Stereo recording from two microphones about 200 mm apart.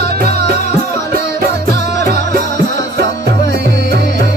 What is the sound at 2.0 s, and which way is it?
Music, 40° left (ahead or behind).